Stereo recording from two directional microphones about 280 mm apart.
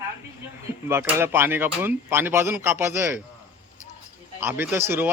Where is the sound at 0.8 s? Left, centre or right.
Centre.